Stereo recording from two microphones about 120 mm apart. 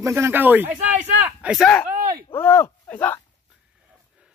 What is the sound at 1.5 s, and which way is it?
Speech, 5° left (ahead or behind).